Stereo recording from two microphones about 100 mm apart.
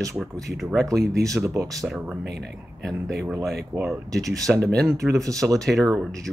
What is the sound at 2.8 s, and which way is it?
Speech, centre (ahead or behind).